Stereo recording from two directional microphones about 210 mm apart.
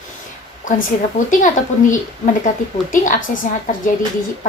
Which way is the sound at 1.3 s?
35° left (ahead or behind).